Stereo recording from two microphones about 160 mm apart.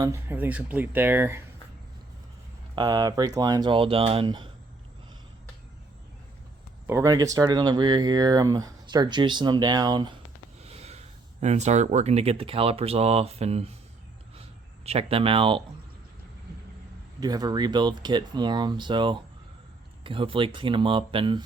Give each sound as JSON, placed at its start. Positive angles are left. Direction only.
{"t": 0.0, "sound": "speech", "side_deg": -15}
{"t": 2.7, "sound": "speech", "side_deg": -25}
{"t": 6.8, "sound": "speech", "side_deg": -20}
{"t": 10.6, "sound": "speech", "side_deg": -40}
{"t": 14.8, "sound": "speech", "side_deg": -40}
{"t": 17.2, "sound": "speech", "side_deg": -25}